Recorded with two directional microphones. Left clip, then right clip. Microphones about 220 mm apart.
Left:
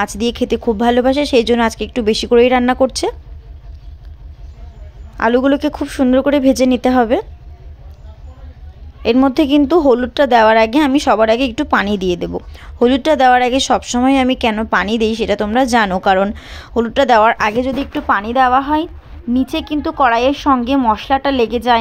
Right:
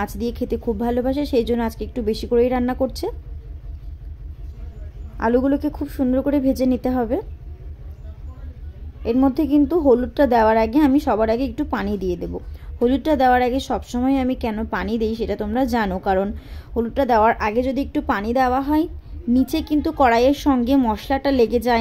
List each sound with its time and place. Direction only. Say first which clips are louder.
0.0 s speech: left 8 dB; 20° left (ahead or behind)
5.1 s speech: left 6 dB; 25° left (ahead or behind)
9.0 s speech: left 7 dB; 25° left (ahead or behind)
17.7 s speech: left 6 dB; 5° left (ahead or behind)